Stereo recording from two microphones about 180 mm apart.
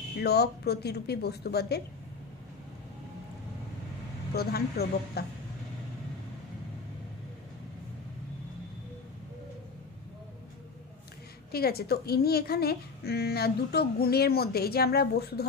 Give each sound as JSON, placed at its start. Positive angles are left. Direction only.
{"t": 0.2, "sound": "a woman's voice", "side_deg": 65}
{"t": 4.3, "sound": "a woman's voice", "side_deg": 60}
{"t": 11.5, "sound": "a woman's voice", "side_deg": 60}